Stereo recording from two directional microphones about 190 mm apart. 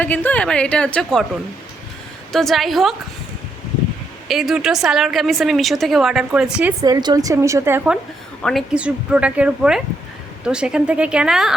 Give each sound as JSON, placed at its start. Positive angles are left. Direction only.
{"t": 0.0, "sound": "a woman's voice", "side_deg": 10}
{"t": 2.3, "sound": "a woman's voice", "side_deg": 0}
{"t": 4.3, "sound": "a woman's voice", "side_deg": 0}
{"t": 6.8, "sound": "a woman's voice", "side_deg": -20}
{"t": 8.4, "sound": "a woman's voice", "side_deg": -5}